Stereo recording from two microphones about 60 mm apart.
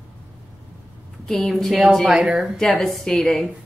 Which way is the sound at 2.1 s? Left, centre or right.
Centre.